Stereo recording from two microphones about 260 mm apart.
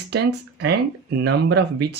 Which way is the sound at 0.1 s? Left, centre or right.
Right.